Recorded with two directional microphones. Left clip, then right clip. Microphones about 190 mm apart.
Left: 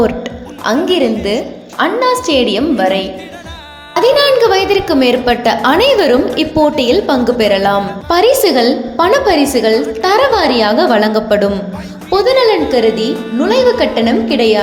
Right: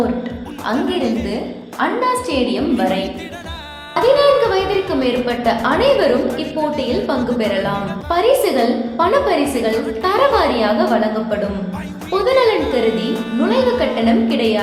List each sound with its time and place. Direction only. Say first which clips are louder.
0.7 s a woman's voice: left 7 dB; 35° left (ahead or behind)
12.1 s a woman's voice: left 4 dB; 30° left (ahead or behind)
13.1 s speech: left 4 dB; centre (ahead or behind)
13.4 s a woman's voice: left 6 dB; 25° left (ahead or behind)